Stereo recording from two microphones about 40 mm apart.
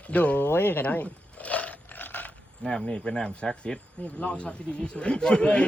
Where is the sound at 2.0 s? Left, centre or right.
Left.